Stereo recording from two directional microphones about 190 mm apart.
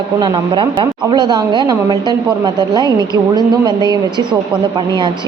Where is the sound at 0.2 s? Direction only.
25° right (ahead or behind).